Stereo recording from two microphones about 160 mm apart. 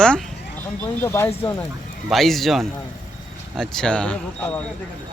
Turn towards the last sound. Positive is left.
turn(degrees=5)  # may be behind; listen again after turning